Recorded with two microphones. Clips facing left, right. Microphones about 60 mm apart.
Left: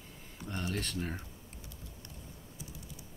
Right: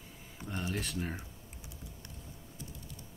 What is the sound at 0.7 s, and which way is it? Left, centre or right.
Speech, centre.